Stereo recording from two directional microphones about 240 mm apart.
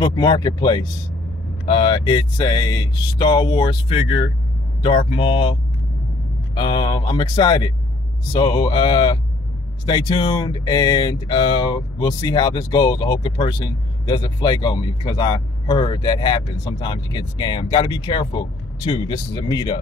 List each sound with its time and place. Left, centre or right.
0.0 s speech: centre